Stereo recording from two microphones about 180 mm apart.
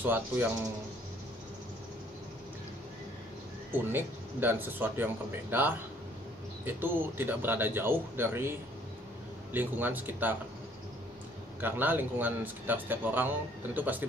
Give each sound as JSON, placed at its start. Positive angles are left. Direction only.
{"t": 0.0, "sound": "speech", "side_deg": -10}
{"t": 3.7, "sound": "speech", "side_deg": -10}
{"t": 11.6, "sound": "speech", "side_deg": -10}